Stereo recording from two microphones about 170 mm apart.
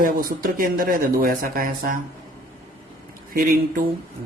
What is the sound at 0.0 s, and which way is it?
Speech, 55° right (ahead or behind).